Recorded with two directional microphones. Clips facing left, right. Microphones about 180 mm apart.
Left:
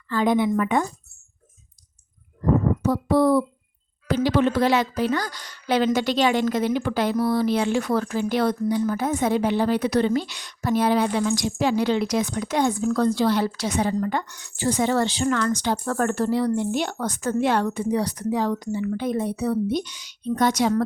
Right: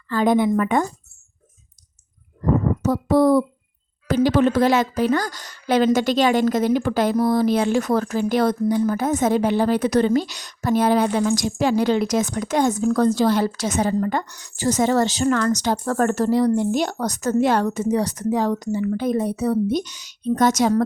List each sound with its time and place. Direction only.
0.1 s speech: 45° right (ahead or behind)
2.8 s speech: 40° right (ahead or behind)